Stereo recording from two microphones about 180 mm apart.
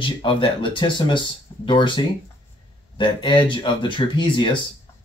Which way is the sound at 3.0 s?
25° left (ahead or behind).